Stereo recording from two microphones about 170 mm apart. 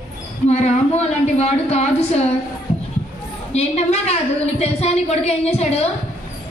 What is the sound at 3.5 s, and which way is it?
A woman's voice, 40° left (ahead or behind).